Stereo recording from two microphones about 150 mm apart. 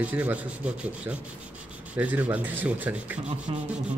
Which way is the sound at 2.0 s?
10° right (ahead or behind).